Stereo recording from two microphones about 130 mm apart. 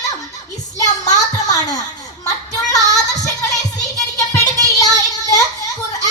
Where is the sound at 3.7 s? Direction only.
30° left (ahead or behind).